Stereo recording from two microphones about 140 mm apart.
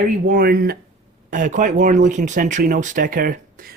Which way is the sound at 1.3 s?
70° right (ahead or behind).